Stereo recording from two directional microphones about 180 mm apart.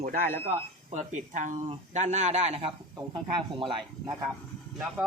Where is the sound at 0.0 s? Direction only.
50° right (ahead or behind); by 3.8 s 30° right (ahead or behind).